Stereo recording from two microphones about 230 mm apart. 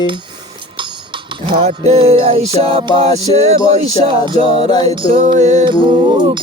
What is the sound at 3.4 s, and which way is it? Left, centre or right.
Music, right.